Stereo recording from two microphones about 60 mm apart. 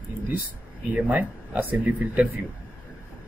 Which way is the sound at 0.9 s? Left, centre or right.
Right.